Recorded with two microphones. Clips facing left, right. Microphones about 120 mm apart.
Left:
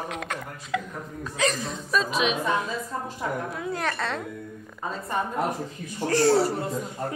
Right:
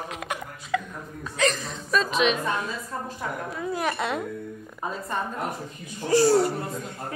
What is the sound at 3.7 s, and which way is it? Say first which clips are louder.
Speech: right 3 dB; 10° right (ahead or behind).